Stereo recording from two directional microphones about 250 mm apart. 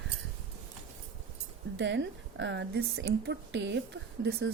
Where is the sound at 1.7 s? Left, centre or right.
Right.